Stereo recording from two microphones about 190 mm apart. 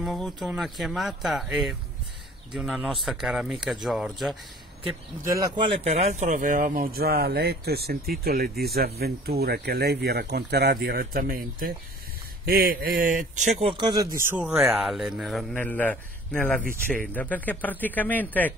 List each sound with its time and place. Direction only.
0.0 s a man's voice: centre (ahead or behind)
5.2 s speech: 20° right (ahead or behind)
5.9 s speech: 35° right (ahead or behind)
14.3 s a man's voice: 5° right (ahead or behind)